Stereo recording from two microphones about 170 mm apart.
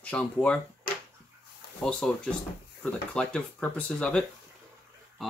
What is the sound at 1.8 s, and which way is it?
Speech, 5° left (ahead or behind).